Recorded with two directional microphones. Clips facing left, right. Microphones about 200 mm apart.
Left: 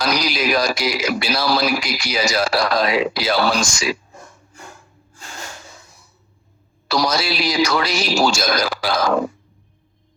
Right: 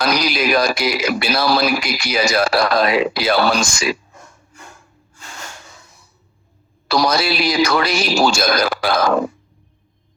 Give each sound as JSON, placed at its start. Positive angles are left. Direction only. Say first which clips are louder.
{"t": 0.0, "sound": "a man's voice", "louder": "right 2 dB", "side_deg": -55}
{"t": 6.8, "sound": "a man's voice", "louder": "right 3 dB", "side_deg": -55}